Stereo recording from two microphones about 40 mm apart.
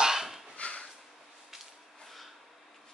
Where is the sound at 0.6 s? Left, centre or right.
Left.